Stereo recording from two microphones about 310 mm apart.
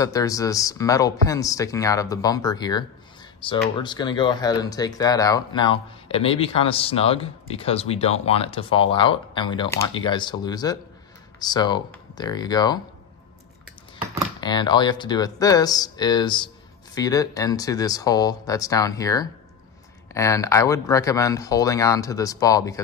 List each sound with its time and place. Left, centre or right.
0.0 s speech: centre
14.4 s speech: centre